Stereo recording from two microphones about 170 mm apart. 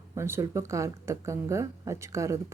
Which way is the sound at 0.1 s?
15° right (ahead or behind).